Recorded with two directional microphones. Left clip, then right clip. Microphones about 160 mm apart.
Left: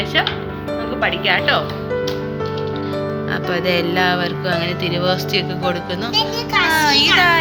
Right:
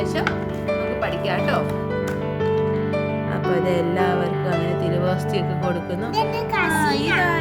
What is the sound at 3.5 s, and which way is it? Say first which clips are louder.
Speech: left 2 dB; 15° right (ahead or behind).